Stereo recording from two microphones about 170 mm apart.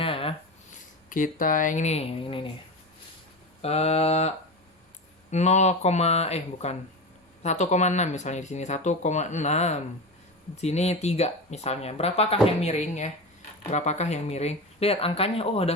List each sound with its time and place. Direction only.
0.0 s a sound: 35° left (ahead or behind)
1.1 s speech: 55° left (ahead or behind); by 2.5 s 30° left (ahead or behind)
3.6 s speech: 40° left (ahead or behind)